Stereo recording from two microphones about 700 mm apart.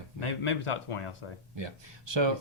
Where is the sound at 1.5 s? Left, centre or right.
Right.